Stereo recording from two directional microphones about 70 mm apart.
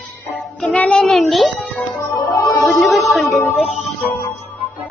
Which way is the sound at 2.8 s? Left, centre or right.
Centre.